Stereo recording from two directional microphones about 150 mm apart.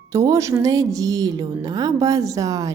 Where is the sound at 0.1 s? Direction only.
20° right (ahead or behind).